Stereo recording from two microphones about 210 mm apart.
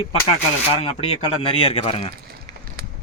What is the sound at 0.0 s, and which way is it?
Speech, 25° left (ahead or behind).